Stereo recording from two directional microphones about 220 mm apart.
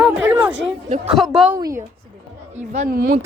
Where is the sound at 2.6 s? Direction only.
35° right (ahead or behind).